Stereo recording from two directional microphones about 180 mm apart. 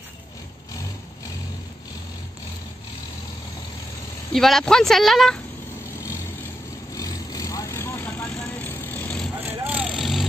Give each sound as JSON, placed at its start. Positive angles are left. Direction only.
{"t": 4.3, "sound": "speech", "side_deg": 0}
{"t": 7.0, "sound": "vehicle", "side_deg": 20}
{"t": 9.3, "sound": "vehicle", "side_deg": -10}